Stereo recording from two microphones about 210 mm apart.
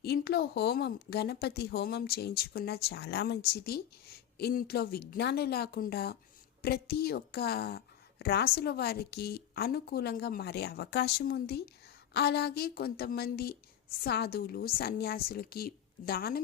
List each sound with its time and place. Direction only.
0.0 s a woman's voice: 50° left (ahead or behind)